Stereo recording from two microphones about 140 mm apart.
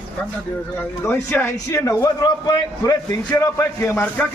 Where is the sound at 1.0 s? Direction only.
15° left (ahead or behind).